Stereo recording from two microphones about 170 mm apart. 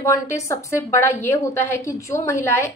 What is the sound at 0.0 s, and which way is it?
A woman's voice, 15° left (ahead or behind).